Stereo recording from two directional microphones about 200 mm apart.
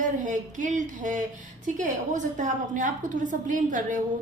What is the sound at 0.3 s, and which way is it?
A woman's voice, 40° right (ahead or behind).